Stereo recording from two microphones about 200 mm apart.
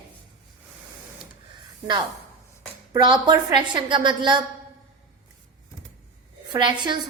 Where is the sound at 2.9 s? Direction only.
20° right (ahead or behind).